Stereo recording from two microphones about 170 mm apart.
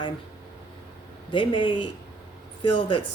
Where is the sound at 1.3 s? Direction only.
30° left (ahead or behind).